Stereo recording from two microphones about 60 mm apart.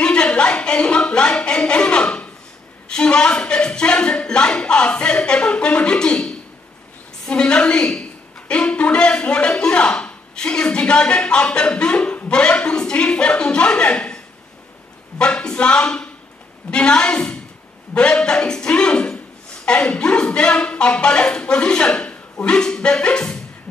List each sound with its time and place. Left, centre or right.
0.0 s a woman's voice: centre